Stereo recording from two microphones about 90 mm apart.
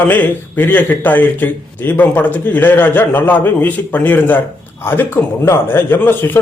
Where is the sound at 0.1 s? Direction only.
20° left (ahead or behind).